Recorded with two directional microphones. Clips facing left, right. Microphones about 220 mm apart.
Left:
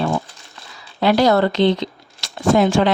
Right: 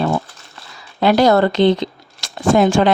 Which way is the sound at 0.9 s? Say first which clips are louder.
Right 2 dB; 50° right (ahead or behind).